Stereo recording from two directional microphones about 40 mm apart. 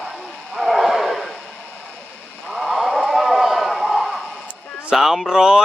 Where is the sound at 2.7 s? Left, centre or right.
Centre.